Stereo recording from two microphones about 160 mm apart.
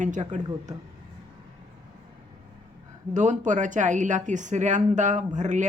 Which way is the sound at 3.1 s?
50° right (ahead or behind).